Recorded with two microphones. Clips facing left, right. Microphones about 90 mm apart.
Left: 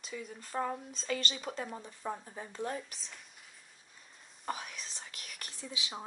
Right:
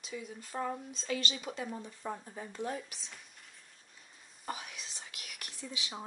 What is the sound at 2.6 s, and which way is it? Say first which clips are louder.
Speech: even; 40° left (ahead or behind).